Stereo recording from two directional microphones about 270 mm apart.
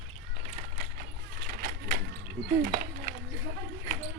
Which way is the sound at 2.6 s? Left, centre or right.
Right.